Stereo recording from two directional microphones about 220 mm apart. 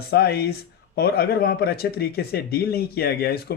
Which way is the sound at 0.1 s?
45° left (ahead or behind).